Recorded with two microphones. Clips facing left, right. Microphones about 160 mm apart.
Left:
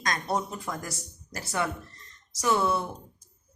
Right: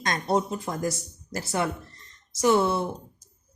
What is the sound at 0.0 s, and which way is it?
Speech, 25° right (ahead or behind).